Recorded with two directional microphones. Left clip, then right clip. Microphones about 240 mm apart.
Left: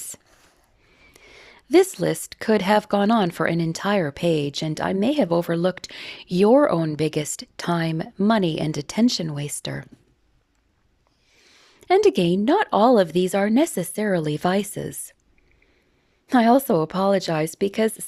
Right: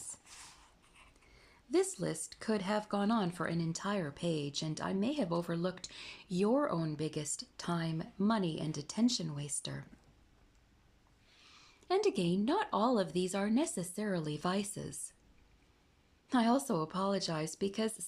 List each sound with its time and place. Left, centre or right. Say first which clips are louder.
1.1 s speech: left 16 dB; left
11.3 s speech: left 8 dB; left
16.2 s speech: left 15 dB; left